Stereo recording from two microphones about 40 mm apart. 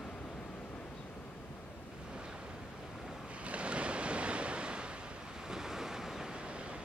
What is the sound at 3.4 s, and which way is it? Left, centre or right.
Waves, right.